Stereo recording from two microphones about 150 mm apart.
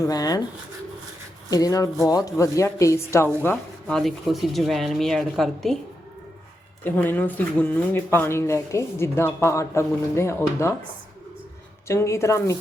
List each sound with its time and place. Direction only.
0.0 s speech: 25° left (ahead or behind)
1.5 s speech: 25° left (ahead or behind); by 5.8 s centre (ahead or behind)
6.8 s speech: 10° left (ahead or behind)
11.9 s speech: 20° left (ahead or behind)